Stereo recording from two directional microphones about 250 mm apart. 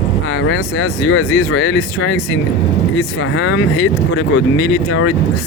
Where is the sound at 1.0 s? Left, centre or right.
Left.